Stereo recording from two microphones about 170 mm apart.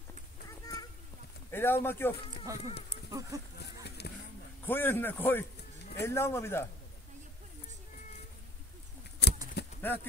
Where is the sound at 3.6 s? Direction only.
75° left (ahead or behind).